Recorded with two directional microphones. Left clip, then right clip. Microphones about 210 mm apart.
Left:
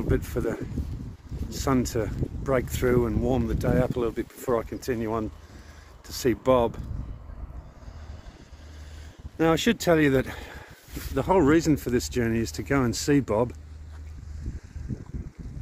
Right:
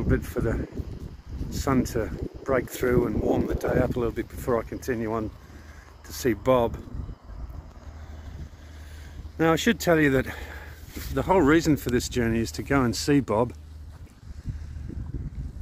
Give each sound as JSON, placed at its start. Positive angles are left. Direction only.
{"t": 0.1, "sound": "speech", "side_deg": 15}
{"t": 1.5, "sound": "speech", "side_deg": 5}
{"t": 1.8, "sound": "speech", "side_deg": 15}
{"t": 2.0, "sound": "speech", "side_deg": 5}
{"t": 6.0, "sound": "speech", "side_deg": 0}
{"t": 9.4, "sound": "speech", "side_deg": 0}
{"t": 10.9, "sound": "a sound", "side_deg": 30}
{"t": 11.1, "sound": "speech", "side_deg": 0}